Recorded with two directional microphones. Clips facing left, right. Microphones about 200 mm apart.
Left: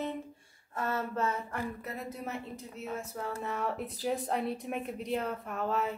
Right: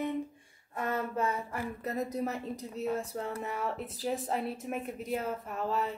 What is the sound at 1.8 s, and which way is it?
A woman's voice, 40° right (ahead or behind).